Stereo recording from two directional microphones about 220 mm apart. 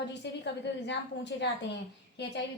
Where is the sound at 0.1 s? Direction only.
50° left (ahead or behind).